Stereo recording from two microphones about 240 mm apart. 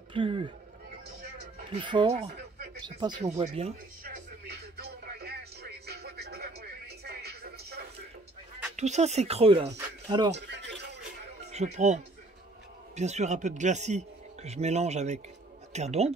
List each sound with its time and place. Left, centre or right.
0.1 s speech: right
1.7 s speech: centre
4.7 s music: right
8.7 s speech: right
10.3 s a sound: right
11.5 s speech: right